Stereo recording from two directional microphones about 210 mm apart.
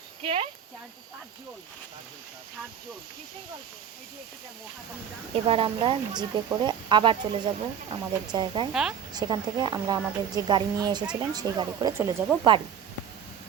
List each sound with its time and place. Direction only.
0.2 s speech: 25° right (ahead or behind)
5.3 s speech: 25° right (ahead or behind)
8.7 s speech: 5° right (ahead or behind)
9.1 s speech: 20° right (ahead or behind)